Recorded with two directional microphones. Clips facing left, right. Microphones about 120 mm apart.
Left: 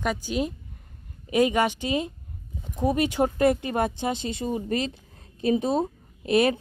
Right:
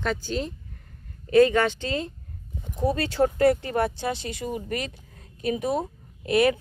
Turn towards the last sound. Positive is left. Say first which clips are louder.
# even
turn(degrees=25)  # may be behind; listen again after turning